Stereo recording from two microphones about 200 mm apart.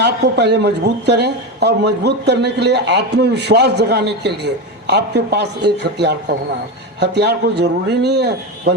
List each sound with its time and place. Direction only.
0.0 s a man's voice: 60° right (ahead or behind)